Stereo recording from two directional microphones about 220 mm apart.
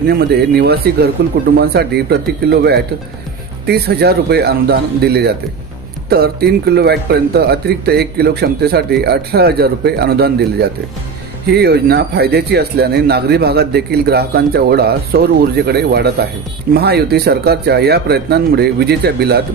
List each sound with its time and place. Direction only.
0.1 s speech: 45° right (ahead or behind)